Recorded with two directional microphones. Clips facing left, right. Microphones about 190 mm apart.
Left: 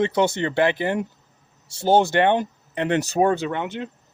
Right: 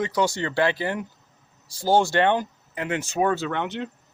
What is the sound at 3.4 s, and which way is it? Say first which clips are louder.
Speech: left 1 dB; 10° left (ahead or behind).